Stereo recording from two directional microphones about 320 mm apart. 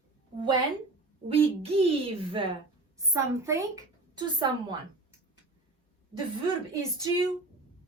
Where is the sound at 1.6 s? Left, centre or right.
Centre.